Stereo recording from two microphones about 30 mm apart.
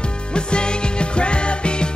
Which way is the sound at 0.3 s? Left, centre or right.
Left.